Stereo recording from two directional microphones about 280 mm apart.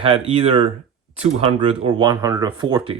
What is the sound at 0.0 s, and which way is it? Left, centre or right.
Speech, centre.